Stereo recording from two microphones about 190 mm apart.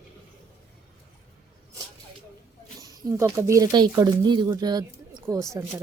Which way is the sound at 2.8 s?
15° right (ahead or behind).